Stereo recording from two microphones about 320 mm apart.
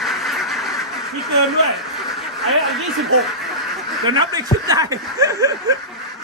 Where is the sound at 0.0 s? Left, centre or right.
Centre.